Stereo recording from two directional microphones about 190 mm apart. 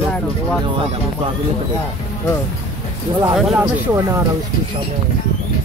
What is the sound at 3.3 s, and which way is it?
Speech, 5° right (ahead or behind).